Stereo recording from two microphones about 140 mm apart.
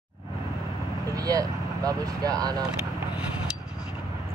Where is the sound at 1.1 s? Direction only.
25° right (ahead or behind).